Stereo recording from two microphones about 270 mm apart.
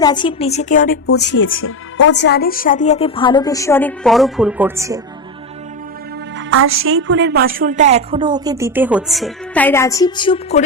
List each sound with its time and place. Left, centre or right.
0.0 s speech: centre
1.0 s speech: left; by 4.9 s centre
6.3 s a woman's voice: right; by 10.6 s centre